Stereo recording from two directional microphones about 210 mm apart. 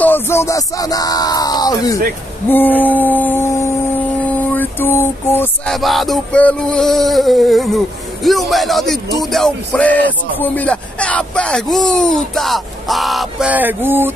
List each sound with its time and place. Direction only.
0.0 s speech: 10° left (ahead or behind)
2.5 s music: 10° left (ahead or behind); by 14.1 s 10° right (ahead or behind)